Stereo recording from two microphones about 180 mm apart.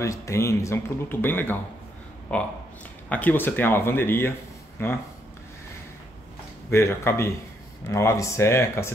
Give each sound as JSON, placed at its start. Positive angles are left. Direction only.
{"t": 0.0, "sound": "speech", "side_deg": 15}
{"t": 6.7, "sound": "speech", "side_deg": 15}